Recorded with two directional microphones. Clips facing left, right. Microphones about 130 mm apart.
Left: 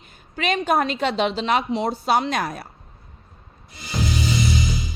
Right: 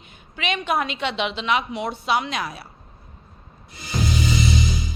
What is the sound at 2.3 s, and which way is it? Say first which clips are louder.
Speech: left 4 dB; 50° left (ahead or behind).